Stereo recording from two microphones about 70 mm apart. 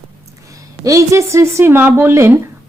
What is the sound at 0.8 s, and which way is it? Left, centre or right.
A woman's voice, right.